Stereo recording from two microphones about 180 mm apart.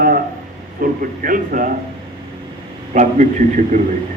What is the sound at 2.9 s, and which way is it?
Speech, 45° right (ahead or behind).